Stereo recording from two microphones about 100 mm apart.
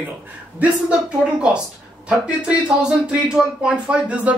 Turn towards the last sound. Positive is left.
turn(degrees=-10)  # may be behind; listen again after turning